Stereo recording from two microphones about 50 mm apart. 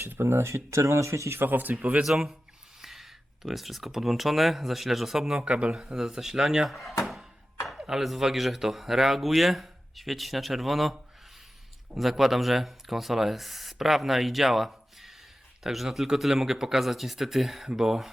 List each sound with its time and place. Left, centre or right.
0.0 s speech: right
1.4 s speech: right
1.7 s speech: right
2.0 s speech: centre
5.4 s speech: right
5.7 s speech: centre
6.7 s speech: centre